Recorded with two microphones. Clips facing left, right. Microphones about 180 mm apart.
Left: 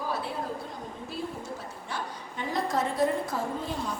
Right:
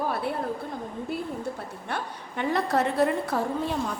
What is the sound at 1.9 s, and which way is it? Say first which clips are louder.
A woman's voice: right 3 dB; 60° right (ahead or behind).